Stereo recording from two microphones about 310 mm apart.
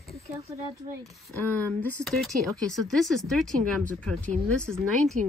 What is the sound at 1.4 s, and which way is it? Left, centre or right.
Speech, centre.